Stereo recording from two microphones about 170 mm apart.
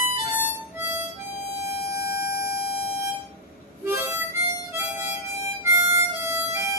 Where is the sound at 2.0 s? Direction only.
65° left (ahead or behind).